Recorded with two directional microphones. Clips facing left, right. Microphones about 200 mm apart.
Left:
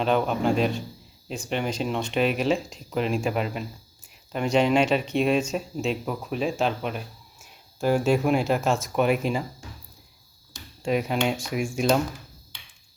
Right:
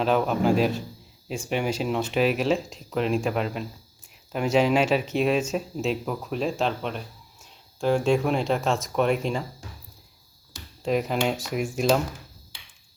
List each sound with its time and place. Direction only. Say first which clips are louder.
0.0 s speech: right 1 dB; centre (ahead or behind)
10.5 s speech: even; centre (ahead or behind)